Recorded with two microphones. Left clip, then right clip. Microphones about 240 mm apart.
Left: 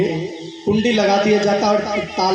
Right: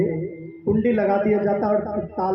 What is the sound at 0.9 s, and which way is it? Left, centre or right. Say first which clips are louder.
Speech: left 7 dB; left.